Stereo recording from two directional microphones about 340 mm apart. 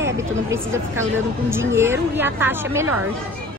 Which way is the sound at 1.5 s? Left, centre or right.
Centre.